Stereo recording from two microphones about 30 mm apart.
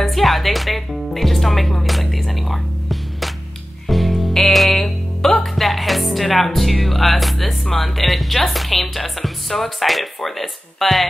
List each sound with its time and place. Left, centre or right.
0.0 s music: centre
5.6 s music: centre